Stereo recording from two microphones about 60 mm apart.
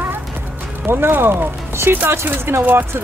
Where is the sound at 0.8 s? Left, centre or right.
Right.